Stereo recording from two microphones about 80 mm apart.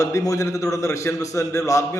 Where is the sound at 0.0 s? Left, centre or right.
Left.